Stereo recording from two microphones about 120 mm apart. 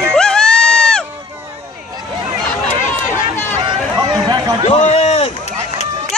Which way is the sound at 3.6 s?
35° right (ahead or behind).